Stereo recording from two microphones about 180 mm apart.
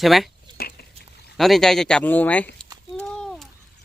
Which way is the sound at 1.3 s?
Centre (ahead or behind).